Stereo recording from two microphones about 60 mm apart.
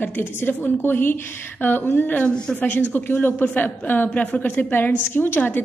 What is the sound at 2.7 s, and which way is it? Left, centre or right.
A woman's voice, left.